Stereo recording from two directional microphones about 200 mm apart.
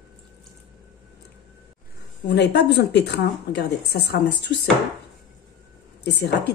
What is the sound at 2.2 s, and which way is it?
Speech, 55° left (ahead or behind).